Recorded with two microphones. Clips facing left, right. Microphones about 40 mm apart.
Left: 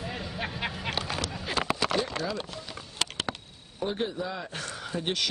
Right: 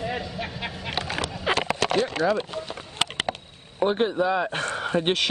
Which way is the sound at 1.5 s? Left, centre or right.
Right.